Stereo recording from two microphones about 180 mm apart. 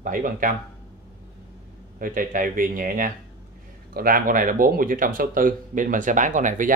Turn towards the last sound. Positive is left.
turn(degrees=-45)  # may be behind; listen again after turning